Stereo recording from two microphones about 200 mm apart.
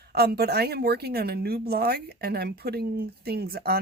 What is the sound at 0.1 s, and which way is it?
A woman's voice, 50° right (ahead or behind).